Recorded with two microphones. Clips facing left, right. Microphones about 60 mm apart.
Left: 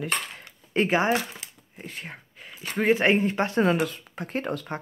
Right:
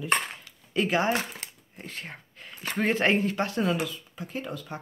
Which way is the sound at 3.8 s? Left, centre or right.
Left.